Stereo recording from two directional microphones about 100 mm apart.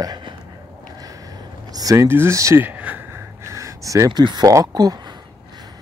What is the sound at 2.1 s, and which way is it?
Speech, 25° right (ahead or behind).